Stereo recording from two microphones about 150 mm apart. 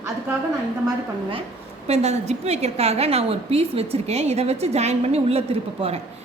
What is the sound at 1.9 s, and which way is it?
A woman's voice, 45° right (ahead or behind).